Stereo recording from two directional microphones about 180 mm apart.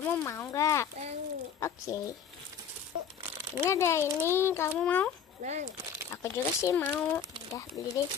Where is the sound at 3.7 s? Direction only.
15° left (ahead or behind).